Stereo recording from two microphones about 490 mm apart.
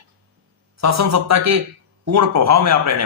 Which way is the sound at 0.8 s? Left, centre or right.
Right.